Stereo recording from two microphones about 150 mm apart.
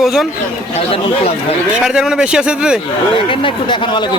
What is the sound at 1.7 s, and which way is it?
A man's voice, 5° right (ahead or behind).